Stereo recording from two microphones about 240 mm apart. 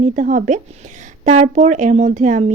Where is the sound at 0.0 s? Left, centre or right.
Right.